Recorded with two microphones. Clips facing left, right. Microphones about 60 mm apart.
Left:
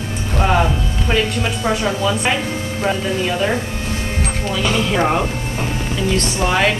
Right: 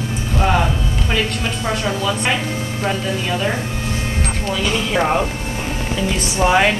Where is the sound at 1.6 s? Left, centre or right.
Centre.